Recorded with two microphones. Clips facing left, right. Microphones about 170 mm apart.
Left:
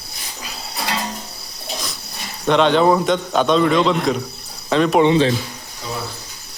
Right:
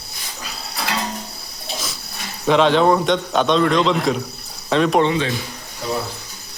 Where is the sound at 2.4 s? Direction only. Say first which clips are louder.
Even; centre (ahead or behind).